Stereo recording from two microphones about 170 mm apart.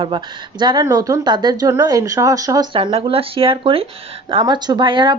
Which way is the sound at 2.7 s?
30° right (ahead or behind).